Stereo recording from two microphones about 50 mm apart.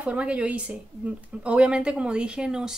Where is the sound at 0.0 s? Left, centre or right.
Right.